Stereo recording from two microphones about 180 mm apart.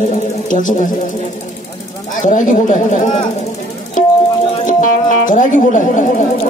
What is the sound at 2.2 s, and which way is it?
Speech, 45° left (ahead or behind).